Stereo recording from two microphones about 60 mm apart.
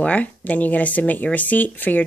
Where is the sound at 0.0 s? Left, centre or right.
Left.